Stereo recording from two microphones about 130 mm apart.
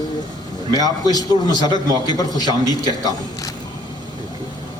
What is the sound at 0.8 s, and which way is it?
A man's voice, 30° left (ahead or behind).